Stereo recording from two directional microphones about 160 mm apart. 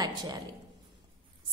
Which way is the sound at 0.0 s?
25° right (ahead or behind).